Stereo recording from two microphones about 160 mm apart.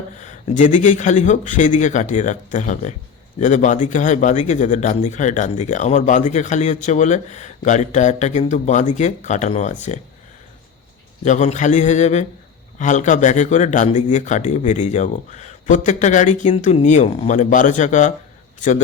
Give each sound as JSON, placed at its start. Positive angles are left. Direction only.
{"t": 0.2, "sound": "a man's voice", "side_deg": 50}
{"t": 11.3, "sound": "a man's voice", "side_deg": 50}